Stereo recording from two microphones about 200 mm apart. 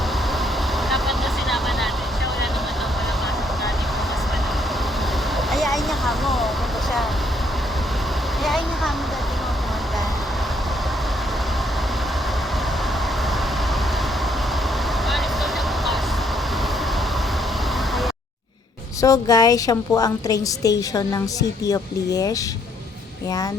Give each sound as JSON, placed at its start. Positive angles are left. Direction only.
{"t": 0.9, "sound": "vehicle", "side_deg": 0}
{"t": 5.5, "sound": "vehicle", "side_deg": 0}
{"t": 8.4, "sound": "a sound", "side_deg": 0}
{"t": 19.0, "sound": "a woman's voice", "side_deg": 20}